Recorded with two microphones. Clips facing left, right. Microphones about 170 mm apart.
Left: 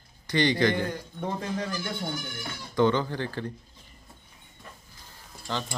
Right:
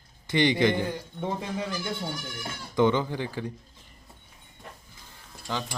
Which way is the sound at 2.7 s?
15° right (ahead or behind).